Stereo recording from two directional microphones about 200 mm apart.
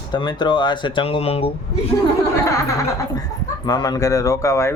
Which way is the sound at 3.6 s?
20° left (ahead or behind).